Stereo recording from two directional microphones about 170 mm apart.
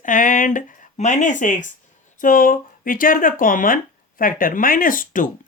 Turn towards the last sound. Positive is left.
turn(degrees=50)  # may be behind; listen again after turning